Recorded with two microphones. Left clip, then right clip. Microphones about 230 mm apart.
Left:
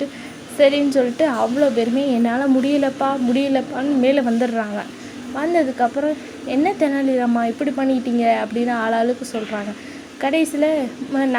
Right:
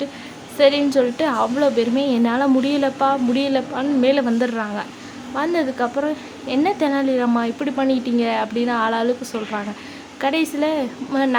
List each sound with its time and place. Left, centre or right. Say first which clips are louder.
0.6 s a woman's voice: even; centre
10.2 s a woman's voice: left 2 dB; centre